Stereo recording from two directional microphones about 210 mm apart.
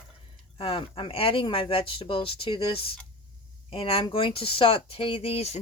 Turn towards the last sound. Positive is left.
turn(degrees=30)  # may be behind; listen again after turning